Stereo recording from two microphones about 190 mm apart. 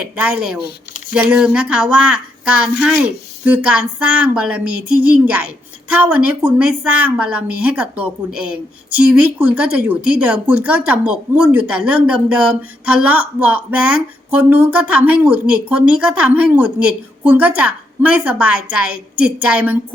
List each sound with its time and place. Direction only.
0.0 s a woman's voice: 10° right (ahead or behind)